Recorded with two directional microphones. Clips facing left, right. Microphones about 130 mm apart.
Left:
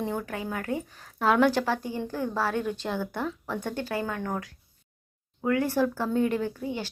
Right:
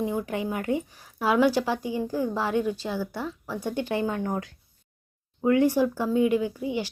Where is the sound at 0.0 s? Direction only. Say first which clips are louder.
Right 3 dB; 10° right (ahead or behind).